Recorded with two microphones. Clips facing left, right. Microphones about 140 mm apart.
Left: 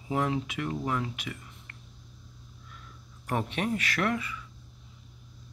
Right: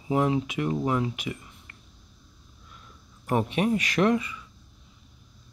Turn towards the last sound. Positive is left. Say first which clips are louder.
# right 7 dB
turn(degrees=-20)  # may be behind; listen again after turning